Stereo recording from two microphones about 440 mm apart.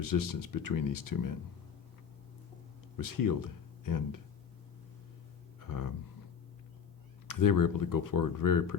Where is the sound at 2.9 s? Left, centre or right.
Left.